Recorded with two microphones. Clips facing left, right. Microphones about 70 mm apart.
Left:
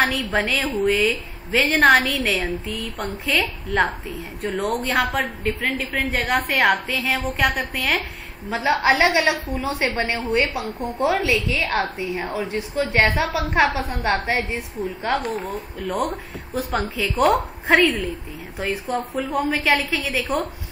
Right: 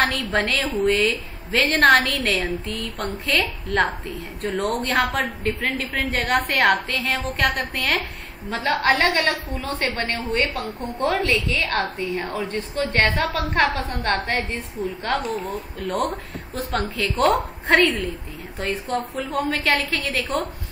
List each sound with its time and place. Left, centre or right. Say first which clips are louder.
0.0 s a woman's voice: left 1 dB; centre
14.8 s a woman's voice: left 1 dB; centre